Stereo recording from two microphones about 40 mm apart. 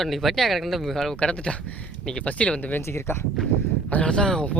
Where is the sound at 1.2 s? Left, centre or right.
Left.